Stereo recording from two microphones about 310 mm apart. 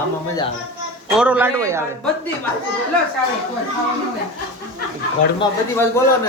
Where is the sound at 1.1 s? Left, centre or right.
Centre.